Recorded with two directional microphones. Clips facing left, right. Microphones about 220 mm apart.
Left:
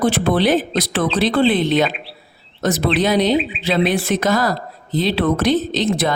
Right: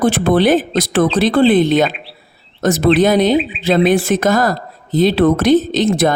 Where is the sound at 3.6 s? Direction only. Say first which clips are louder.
Right 7 dB; 45° right (ahead or behind).